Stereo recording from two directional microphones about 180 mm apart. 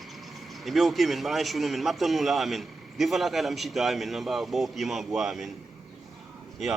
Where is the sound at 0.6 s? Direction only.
Centre (ahead or behind).